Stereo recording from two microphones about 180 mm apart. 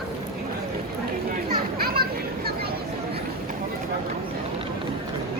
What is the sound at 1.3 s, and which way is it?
Children playing, 55° right (ahead or behind).